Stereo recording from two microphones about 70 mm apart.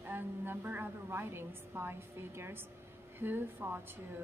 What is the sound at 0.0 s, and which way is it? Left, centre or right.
A woman's voice, right.